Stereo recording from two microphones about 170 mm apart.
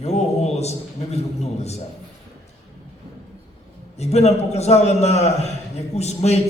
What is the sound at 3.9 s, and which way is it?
A man's voice, 40° left (ahead or behind).